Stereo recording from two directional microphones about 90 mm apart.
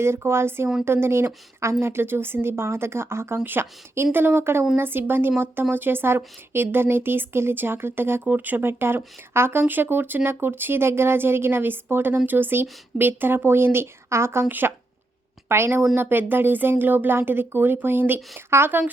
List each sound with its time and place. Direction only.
0.0 s a woman's voice: 30° right (ahead or behind)